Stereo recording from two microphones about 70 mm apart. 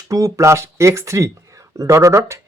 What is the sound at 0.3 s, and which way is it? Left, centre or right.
Speech, right.